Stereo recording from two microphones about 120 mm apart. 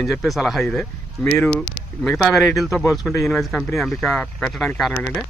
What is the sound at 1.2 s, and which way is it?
Speech, 15° left (ahead or behind).